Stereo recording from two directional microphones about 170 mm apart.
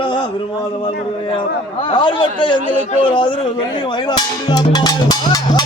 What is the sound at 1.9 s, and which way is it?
A child's voice, 30° left (ahead or behind).